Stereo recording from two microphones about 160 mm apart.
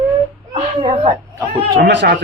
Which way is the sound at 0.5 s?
35° right (ahead or behind).